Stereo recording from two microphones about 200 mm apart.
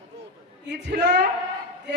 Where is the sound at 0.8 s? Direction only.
60° right (ahead or behind).